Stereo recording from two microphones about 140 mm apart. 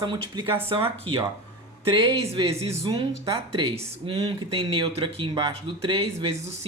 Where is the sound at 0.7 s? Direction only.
45° right (ahead or behind).